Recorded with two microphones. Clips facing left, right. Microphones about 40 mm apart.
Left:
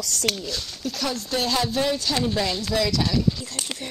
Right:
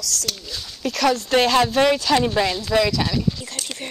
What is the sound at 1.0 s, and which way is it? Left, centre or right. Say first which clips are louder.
Speech: right 9 dB; right.